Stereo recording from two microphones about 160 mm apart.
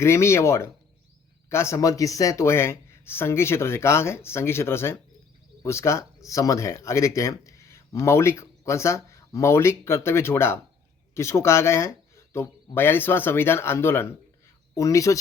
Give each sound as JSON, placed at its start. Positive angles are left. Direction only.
{"t": 0.0, "sound": "speech", "side_deg": 15}